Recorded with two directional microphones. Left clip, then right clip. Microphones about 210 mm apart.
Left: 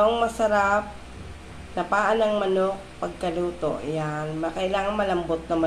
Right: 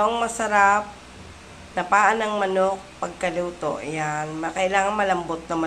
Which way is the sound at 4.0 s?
25° right (ahead or behind).